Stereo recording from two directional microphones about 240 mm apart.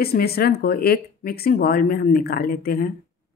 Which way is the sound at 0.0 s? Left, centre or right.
Left.